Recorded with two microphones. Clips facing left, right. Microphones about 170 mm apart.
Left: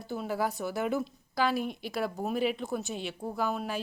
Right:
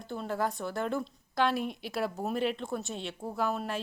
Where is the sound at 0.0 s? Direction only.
5° left (ahead or behind).